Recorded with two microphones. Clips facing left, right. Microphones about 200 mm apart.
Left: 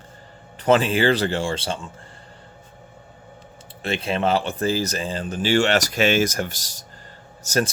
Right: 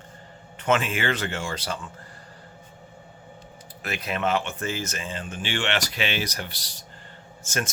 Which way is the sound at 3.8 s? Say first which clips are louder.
Left 5 dB; 30° left (ahead or behind).